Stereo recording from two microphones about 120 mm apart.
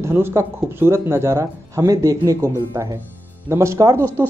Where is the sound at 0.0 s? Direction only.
20° right (ahead or behind).